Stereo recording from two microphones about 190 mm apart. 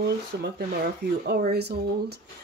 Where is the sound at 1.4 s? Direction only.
60° right (ahead or behind).